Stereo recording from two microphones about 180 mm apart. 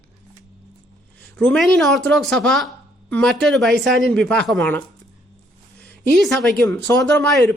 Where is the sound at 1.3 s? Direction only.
5° left (ahead or behind).